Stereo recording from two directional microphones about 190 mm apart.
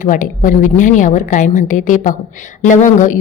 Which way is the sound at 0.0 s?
45° left (ahead or behind).